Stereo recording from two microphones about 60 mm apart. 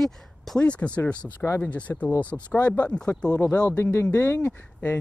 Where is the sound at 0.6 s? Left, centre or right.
Centre.